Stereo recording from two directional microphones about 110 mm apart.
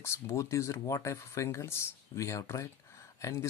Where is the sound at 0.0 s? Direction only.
25° left (ahead or behind).